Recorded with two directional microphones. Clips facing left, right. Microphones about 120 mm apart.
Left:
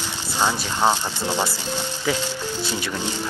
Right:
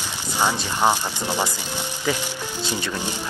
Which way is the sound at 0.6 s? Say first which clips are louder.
Even; 15° right (ahead or behind).